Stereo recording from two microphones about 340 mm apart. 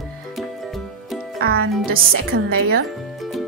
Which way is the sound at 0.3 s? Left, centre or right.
Centre.